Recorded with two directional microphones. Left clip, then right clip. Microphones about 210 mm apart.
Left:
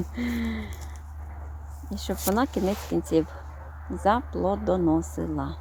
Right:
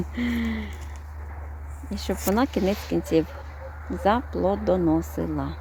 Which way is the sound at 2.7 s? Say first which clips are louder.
Right 2 dB; 25° left (ahead or behind).